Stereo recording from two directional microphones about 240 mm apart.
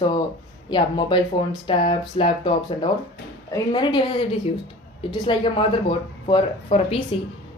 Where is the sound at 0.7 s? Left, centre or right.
Centre.